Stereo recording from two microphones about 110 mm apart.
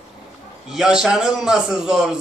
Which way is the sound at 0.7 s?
5° right (ahead or behind).